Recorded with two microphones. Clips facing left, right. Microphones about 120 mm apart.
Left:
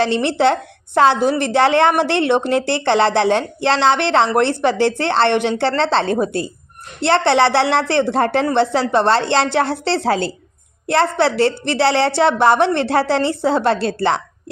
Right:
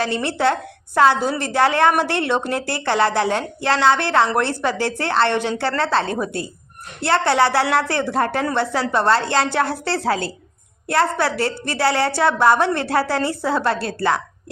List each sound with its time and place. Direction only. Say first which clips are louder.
0.0 s speech: left 4 dB; 25° left (ahead or behind)